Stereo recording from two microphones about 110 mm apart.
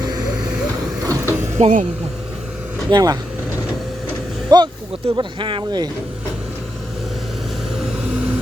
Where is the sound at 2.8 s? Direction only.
40° right (ahead or behind).